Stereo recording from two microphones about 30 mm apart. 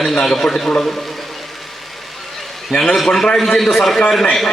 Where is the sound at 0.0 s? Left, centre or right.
Centre.